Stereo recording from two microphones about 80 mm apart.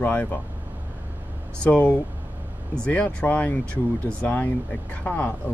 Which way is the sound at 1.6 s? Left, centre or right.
Centre.